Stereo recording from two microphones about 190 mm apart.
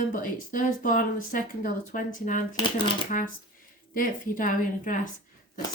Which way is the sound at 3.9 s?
45° left (ahead or behind).